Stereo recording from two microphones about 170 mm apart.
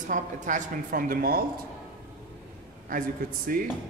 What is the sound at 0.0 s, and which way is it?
Speech, 50° right (ahead or behind).